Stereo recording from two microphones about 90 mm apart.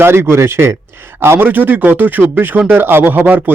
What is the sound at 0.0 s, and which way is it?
Speech, 25° right (ahead or behind).